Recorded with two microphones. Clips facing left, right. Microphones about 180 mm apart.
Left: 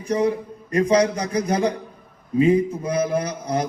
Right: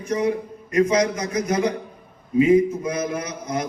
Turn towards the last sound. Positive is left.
turn(degrees=30)  # may be behind; listen again after turning